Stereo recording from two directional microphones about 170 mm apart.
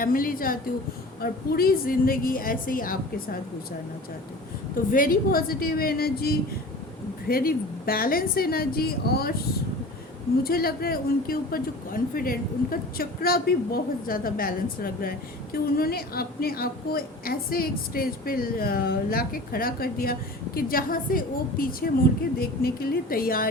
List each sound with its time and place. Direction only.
0.0 s a woman's voice: 55° left (ahead or behind)
4.9 s a woman's voice: 55° left (ahead or behind)
10.4 s a woman's voice: 60° left (ahead or behind)